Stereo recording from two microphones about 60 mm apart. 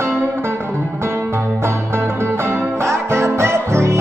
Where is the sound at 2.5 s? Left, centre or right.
Right.